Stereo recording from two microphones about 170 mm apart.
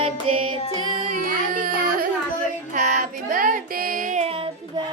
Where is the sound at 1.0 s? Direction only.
50° right (ahead or behind).